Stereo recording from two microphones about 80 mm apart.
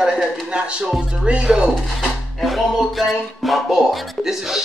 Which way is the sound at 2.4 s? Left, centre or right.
Centre.